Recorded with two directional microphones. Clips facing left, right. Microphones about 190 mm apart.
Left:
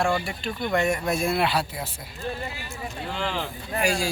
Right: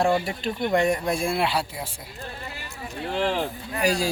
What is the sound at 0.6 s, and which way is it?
Speech, 20° right (ahead or behind).